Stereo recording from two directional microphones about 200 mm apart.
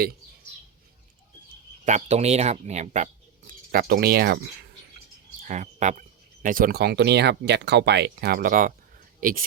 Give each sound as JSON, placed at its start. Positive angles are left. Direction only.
{"t": 1.8, "sound": "speech", "side_deg": -35}
{"t": 3.7, "sound": "speech", "side_deg": -50}
{"t": 5.4, "sound": "speech", "side_deg": -40}